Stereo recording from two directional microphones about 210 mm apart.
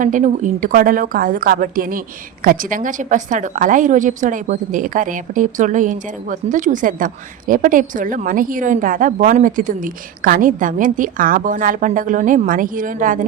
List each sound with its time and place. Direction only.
0.0 s speech: 35° right (ahead or behind)